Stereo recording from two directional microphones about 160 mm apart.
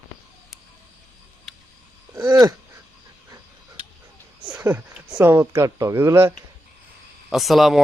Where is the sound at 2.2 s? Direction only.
25° right (ahead or behind).